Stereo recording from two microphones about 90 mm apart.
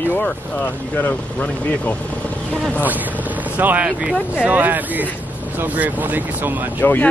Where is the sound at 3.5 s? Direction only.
15° right (ahead or behind).